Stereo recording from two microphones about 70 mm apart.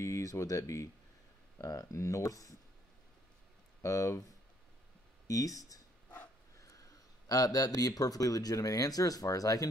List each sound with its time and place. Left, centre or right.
0.0 s speech: left
3.8 s speech: left
5.3 s speech: left